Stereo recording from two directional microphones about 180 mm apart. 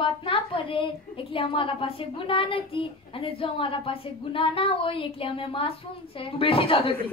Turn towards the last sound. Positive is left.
turn(degrees=30)  # may be behind; listen again after turning